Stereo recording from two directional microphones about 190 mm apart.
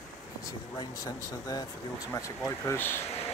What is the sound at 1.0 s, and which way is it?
Speech, 20° left (ahead or behind).